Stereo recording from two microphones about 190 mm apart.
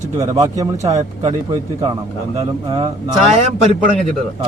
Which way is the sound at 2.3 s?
20° right (ahead or behind).